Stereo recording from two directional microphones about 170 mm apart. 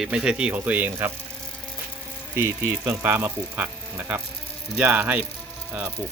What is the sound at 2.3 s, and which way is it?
Speech, 15° right (ahead or behind).